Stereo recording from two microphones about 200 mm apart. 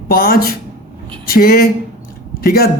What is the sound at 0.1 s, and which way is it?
A man's voice, 45° left (ahead or behind).